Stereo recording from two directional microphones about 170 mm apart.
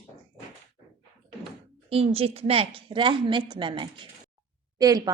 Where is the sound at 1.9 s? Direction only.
35° right (ahead or behind).